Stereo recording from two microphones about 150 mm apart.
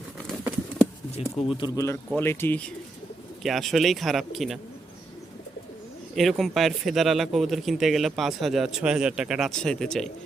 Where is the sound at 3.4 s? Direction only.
Centre (ahead or behind).